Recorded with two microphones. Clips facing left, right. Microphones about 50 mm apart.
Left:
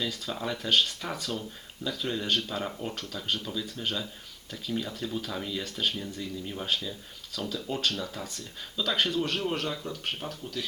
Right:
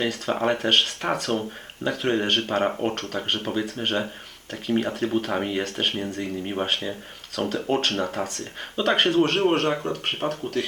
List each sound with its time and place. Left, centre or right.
0.0 s speech: right